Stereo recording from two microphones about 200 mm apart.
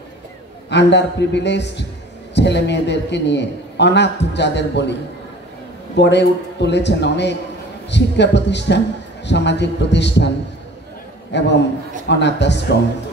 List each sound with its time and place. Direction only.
0.7 s a man's voice: 60° left (ahead or behind)
5.9 s a man's voice: 60° left (ahead or behind)
11.3 s a man's voice: 60° left (ahead or behind)